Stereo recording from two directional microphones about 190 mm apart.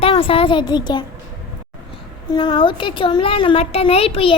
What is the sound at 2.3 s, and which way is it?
A child's voice, 25° left (ahead or behind).